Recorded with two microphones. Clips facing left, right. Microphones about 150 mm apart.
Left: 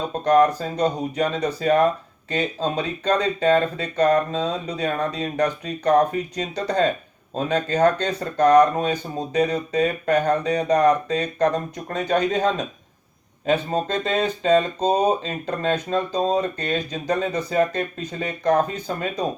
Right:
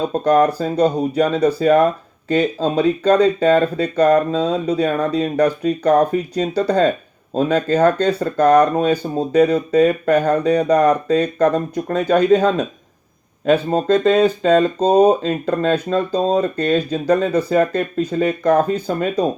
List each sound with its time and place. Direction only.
0.1 s speech: 35° right (ahead or behind)